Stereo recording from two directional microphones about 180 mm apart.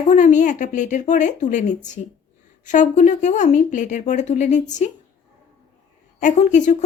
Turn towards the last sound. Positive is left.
turn(degrees=45)  # may be behind; listen again after turning